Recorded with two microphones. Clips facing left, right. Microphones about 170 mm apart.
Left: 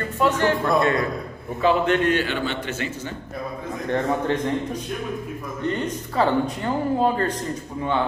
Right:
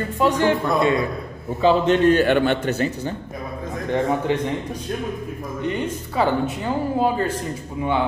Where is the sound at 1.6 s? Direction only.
30° right (ahead or behind).